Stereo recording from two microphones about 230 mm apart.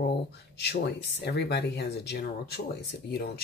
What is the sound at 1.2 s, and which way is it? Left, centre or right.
Speech, left.